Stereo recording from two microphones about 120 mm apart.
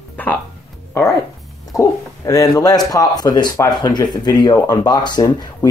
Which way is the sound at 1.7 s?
25° left (ahead or behind).